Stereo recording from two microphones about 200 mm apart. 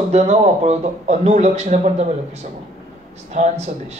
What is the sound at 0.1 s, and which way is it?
Speech, 35° right (ahead or behind).